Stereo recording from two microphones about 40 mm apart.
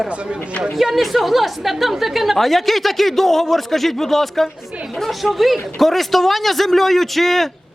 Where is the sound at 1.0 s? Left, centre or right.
Centre.